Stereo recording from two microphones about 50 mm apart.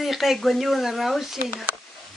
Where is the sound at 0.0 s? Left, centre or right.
Centre.